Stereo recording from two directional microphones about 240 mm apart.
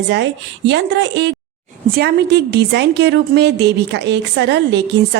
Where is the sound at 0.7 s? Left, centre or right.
Right.